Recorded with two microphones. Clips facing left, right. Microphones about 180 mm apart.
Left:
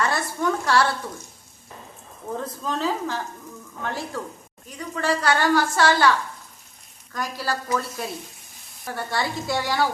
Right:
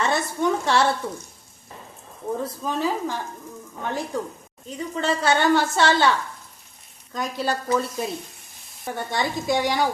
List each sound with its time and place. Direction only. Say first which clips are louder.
0.0 s a sound: right 1 dB; 20° right (ahead or behind)
2.4 s sizzle: even; 10° right (ahead or behind)
4.9 s a woman's voice: right 1 dB; 25° right (ahead or behind)
7.1 s a woman's voice: right 2 dB; 20° right (ahead or behind)
8.8 s sizzle: right 1 dB; 20° right (ahead or behind)